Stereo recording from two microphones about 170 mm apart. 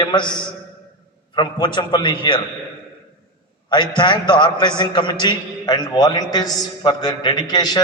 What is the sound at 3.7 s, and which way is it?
A man's voice, 25° left (ahead or behind).